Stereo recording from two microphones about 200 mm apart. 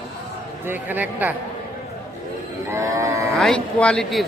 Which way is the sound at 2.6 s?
15° right (ahead or behind).